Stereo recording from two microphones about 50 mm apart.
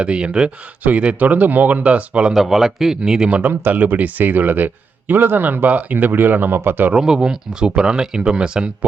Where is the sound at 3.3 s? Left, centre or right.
Right.